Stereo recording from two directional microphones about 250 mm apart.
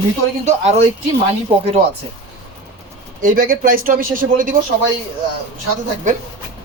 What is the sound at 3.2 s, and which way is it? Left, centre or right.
Speech, right.